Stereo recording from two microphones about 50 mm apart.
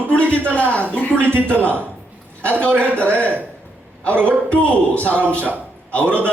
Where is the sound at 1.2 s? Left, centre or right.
Right.